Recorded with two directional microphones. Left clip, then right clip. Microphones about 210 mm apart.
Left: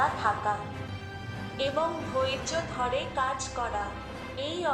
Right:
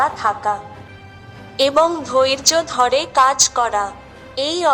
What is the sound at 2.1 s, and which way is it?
A woman's voice, 50° right (ahead or behind).